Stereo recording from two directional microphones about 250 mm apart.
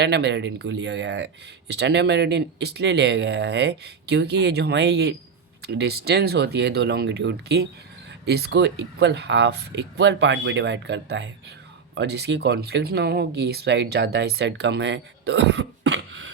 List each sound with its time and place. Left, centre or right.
0.0 s speech: right